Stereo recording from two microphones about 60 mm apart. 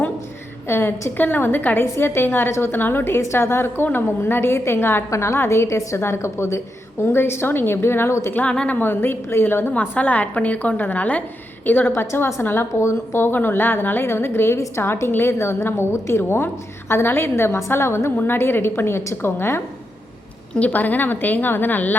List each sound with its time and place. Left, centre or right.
0.7 s a woman's voice: left
7.0 s a woman's voice: left
8.4 s a woman's voice: left
8.8 s a woman's voice: left
9.7 s a woman's voice: left
12.8 s speech: left
13.2 s a woman's voice: left
20.6 s a woman's voice: left